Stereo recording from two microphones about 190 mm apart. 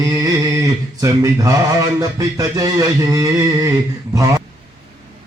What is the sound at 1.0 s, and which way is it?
Speech, 15° right (ahead or behind).